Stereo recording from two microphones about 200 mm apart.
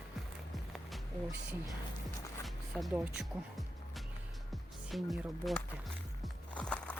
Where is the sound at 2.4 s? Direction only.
Centre (ahead or behind).